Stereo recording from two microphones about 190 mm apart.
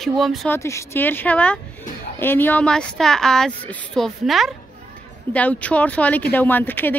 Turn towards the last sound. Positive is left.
turn(degrees=10)  # may be behind; listen again after turning